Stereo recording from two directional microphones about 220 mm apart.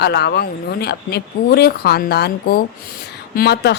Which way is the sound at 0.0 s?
50° left (ahead or behind).